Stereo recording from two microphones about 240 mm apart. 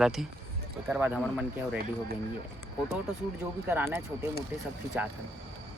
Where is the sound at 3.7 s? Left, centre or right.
Centre.